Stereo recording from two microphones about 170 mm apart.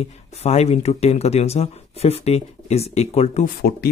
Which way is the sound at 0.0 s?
40° left (ahead or behind).